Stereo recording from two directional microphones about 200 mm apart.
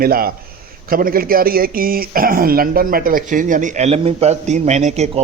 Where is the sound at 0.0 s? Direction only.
50° right (ahead or behind).